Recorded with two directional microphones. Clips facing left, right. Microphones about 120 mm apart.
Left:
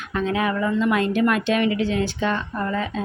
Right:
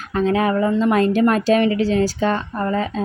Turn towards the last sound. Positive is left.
turn(degrees=-40)  # may be behind; listen again after turning